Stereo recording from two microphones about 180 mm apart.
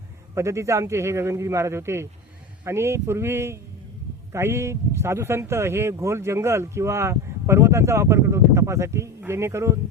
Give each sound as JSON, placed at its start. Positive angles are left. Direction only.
{"t": 0.3, "sound": "speech", "side_deg": -15}